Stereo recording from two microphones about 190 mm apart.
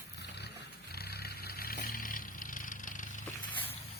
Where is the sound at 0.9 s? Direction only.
55° left (ahead or behind).